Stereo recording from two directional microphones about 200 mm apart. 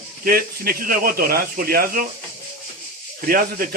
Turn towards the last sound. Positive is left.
turn(degrees=-45)  # may be behind; listen again after turning